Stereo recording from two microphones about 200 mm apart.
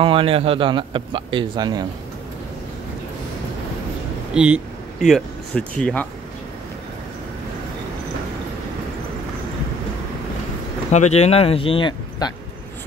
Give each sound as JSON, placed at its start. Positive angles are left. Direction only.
{"t": 0.0, "sound": "a man's voice", "side_deg": -25}
{"t": 4.3, "sound": "speech", "side_deg": -5}
{"t": 10.9, "sound": "speech", "side_deg": 35}